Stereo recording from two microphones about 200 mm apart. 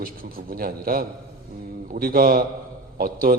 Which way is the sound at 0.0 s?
45° right (ahead or behind).